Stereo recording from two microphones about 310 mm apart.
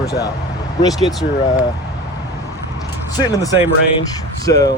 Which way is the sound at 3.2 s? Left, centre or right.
Centre.